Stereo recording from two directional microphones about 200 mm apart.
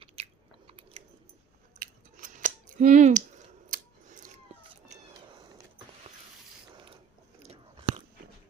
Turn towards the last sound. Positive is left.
turn(degrees=-30)  # may be behind; listen again after turning